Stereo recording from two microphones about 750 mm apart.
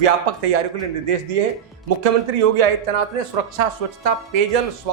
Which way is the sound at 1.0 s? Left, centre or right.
Right.